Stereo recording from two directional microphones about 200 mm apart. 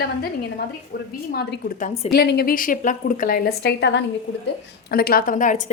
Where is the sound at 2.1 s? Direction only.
55° left (ahead or behind).